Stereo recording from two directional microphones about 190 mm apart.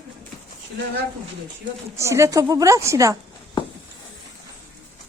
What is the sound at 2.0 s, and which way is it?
A woman's voice, 15° right (ahead or behind).